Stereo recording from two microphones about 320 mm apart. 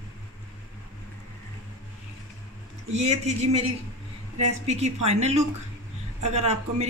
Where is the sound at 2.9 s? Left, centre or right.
Right.